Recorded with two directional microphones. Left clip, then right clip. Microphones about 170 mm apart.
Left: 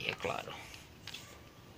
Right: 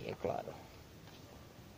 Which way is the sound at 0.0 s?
30° right (ahead or behind).